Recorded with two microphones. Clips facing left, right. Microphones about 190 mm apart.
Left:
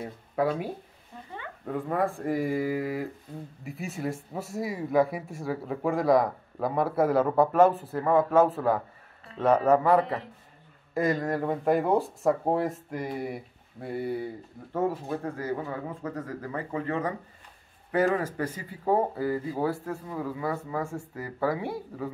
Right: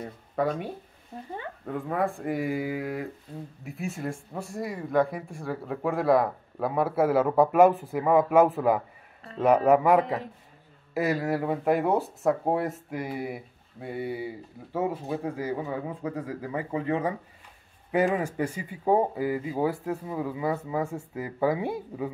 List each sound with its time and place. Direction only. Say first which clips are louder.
0.0 s speech: left 1 dB; 5° left (ahead or behind)
1.7 s speech: left 1 dB; centre (ahead or behind); by 22.1 s 15° right (ahead or behind)